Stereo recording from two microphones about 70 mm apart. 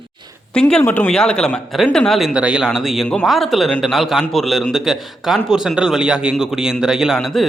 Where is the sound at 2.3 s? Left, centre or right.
Centre.